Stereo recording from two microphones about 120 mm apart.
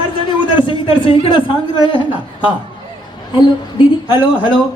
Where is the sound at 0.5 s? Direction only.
45° left (ahead or behind).